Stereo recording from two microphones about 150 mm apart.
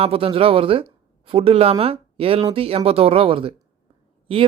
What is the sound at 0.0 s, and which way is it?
Speech, 40° right (ahead or behind).